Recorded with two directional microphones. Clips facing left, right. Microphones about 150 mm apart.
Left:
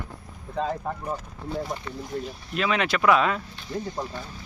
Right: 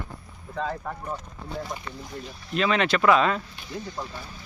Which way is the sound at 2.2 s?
5° left (ahead or behind).